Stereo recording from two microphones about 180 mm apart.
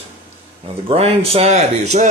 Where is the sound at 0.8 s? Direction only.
35° right (ahead or behind).